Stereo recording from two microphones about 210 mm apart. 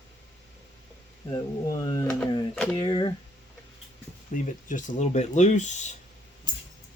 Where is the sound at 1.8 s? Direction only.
15° left (ahead or behind).